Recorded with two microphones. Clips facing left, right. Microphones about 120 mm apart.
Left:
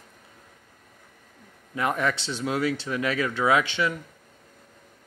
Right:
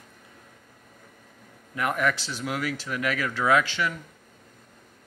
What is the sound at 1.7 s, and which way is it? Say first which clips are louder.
Speech: even; 25° left (ahead or behind).